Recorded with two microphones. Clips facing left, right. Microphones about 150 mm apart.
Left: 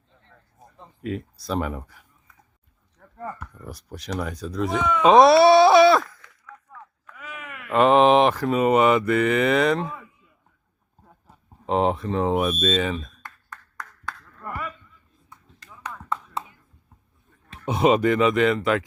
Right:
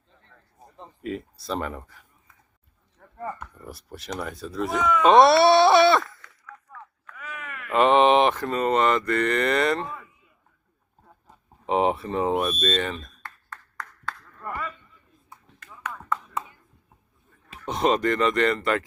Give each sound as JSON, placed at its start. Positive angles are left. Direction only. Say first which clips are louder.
{"t": 1.0, "sound": "speech", "louder": "left 2 dB", "side_deg": 0}
{"t": 3.0, "sound": "mantra", "louder": "right 1 dB", "side_deg": -5}
{"t": 5.0, "sound": "a sound", "louder": "left 2 dB", "side_deg": 0}
{"t": 7.7, "sound": "mantra", "louder": "left 2 dB", "side_deg": 0}
{"t": 11.0, "sound": "speech", "louder": "even", "side_deg": 0}
{"t": 14.1, "sound": "a sound", "louder": "even", "side_deg": 0}
{"t": 17.7, "sound": "mantra", "louder": "left 4 dB", "side_deg": 5}